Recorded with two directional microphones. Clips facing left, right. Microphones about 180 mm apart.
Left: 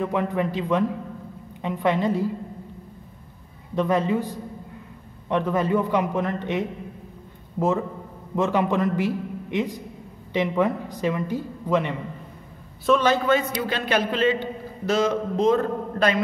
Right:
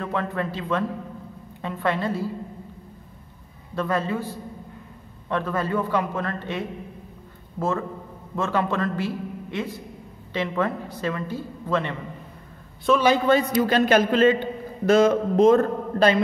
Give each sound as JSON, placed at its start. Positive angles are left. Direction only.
{"t": 0.0, "sound": "a man's voice", "side_deg": 15}
{"t": 3.7, "sound": "a man's voice", "side_deg": 20}
{"t": 12.8, "sound": "a man's voice", "side_deg": -5}
{"t": 13.3, "sound": "a man's voice", "side_deg": -40}
{"t": 16.0, "sound": "a man's voice", "side_deg": -30}